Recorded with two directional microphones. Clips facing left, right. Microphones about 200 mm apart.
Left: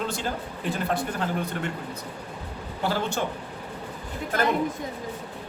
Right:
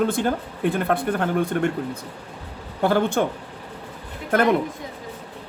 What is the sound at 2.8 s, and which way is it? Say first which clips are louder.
Speech: right 8 dB; 55° right (ahead or behind).